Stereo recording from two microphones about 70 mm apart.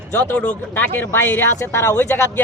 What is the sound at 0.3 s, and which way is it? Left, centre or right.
Speech, left.